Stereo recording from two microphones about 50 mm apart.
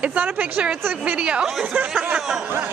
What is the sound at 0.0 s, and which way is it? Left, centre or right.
Speech, right.